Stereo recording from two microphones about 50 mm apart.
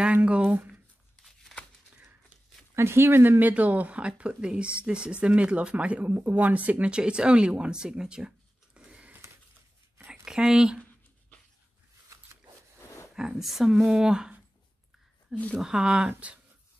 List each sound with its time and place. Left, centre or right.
0.0 s a sound: right
2.7 s speech: right; by 8.3 s centre
8.7 s a sound: right
10.2 s speech: centre
13.1 s a woman's voice: centre
16.1 s speech: right